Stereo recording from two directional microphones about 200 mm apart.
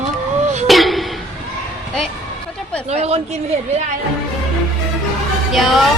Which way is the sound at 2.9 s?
30° right (ahead or behind).